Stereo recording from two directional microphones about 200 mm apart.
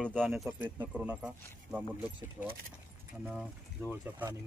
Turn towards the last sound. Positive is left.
turn(degrees=-10)  # may be behind; listen again after turning